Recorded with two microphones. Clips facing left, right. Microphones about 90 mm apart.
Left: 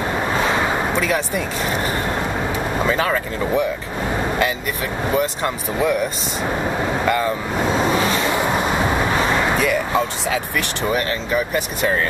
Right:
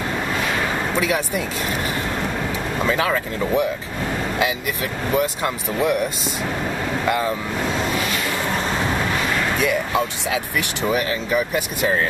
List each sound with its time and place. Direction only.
0.3 s a sound: 30° left (ahead or behind)
0.9 s speech: 5° right (ahead or behind)
3.0 s speech: centre (ahead or behind)
5.1 s speech: centre (ahead or behind)
7.1 s speech: centre (ahead or behind)
7.7 s vehicle: 30° left (ahead or behind)
9.6 s speech: 5° right (ahead or behind)